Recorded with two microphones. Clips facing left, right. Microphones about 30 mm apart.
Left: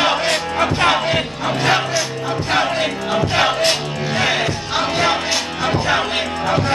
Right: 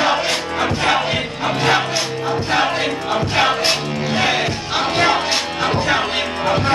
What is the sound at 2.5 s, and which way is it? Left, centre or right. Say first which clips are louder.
Music: left 1 dB; centre.